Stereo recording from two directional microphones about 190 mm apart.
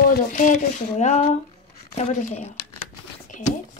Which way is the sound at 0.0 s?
45° left (ahead or behind).